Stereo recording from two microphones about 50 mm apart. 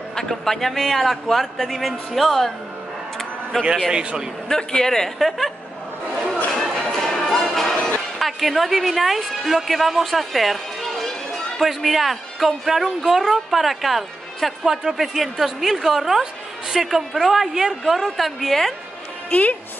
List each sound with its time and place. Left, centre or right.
0.1 s speech: centre
3.5 s speech: centre
3.9 s a man's voice: centre
4.5 s speech: centre
6.9 s music: centre
8.2 s a woman's voice: centre